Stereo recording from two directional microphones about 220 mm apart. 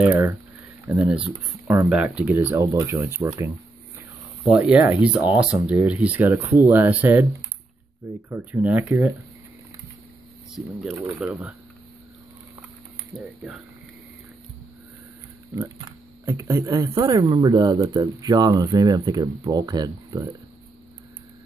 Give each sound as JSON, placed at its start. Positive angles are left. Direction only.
{"t": 0.0, "sound": "a sound", "side_deg": -10}
{"t": 0.8, "sound": "speech", "side_deg": -5}
{"t": 4.5, "sound": "speech", "side_deg": -5}
{"t": 8.3, "sound": "speech", "side_deg": -10}
{"t": 10.5, "sound": "speech", "side_deg": 0}
{"t": 16.3, "sound": "speech", "side_deg": -15}